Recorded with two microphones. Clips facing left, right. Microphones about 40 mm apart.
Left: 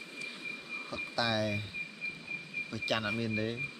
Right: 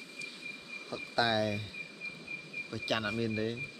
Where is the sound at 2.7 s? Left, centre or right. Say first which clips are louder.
Even; centre.